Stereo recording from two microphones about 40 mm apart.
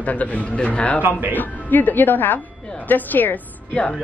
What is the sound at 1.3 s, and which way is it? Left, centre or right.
A woman's voice, left.